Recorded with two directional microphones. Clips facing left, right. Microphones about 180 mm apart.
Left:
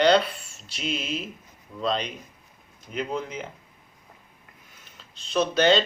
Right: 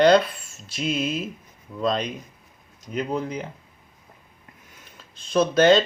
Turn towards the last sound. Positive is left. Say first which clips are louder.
# right 4 dB
turn(degrees=-50)  # may be behind; listen again after turning